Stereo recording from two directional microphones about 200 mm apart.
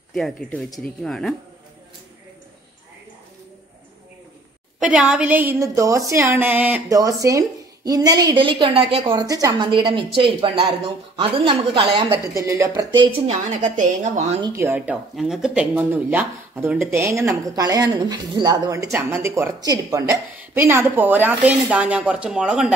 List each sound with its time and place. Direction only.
0.1 s speech: 5° left (ahead or behind)
4.7 s a woman's voice: 5° right (ahead or behind); by 11.9 s 25° right (ahead or behind)
12.1 s a woman's voice: 15° right (ahead or behind); by 14.4 s 40° right (ahead or behind)
14.4 s speech: 10° right (ahead or behind)